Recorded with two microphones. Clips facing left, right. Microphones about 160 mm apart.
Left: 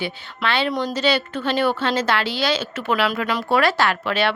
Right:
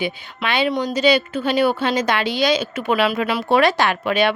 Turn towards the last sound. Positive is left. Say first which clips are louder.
# right 3 dB
turn(degrees=-15)  # may be behind; listen again after turning